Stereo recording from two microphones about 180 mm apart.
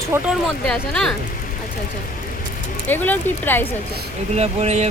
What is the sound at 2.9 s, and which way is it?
Speech, 10° left (ahead or behind).